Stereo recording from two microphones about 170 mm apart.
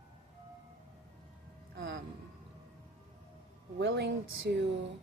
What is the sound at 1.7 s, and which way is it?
Speech, 90° right.